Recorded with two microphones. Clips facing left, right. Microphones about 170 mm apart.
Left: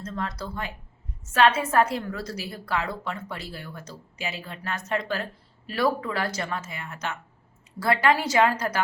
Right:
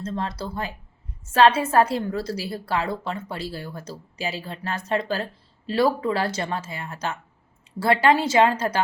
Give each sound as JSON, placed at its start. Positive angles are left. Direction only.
{"t": 0.0, "sound": "a woman's voice", "side_deg": -30}